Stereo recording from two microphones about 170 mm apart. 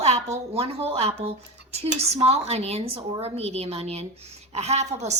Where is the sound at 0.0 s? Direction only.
40° right (ahead or behind).